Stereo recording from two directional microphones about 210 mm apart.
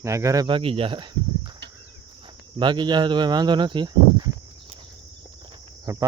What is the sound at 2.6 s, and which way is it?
Speech, 20° right (ahead or behind).